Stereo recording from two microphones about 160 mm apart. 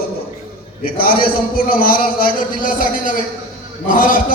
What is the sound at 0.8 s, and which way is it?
A man's voice, 65° left (ahead or behind).